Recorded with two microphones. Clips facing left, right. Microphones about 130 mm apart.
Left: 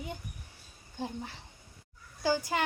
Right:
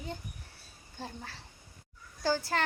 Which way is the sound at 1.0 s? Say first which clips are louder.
Left 5 dB; 15° left (ahead or behind).